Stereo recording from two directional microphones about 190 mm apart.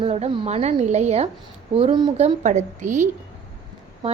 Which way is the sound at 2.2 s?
35° right (ahead or behind).